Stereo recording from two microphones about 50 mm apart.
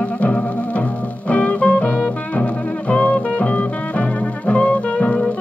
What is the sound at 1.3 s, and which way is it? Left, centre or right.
Music, left.